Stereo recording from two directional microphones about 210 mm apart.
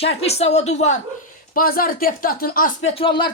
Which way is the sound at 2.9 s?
25° left (ahead or behind).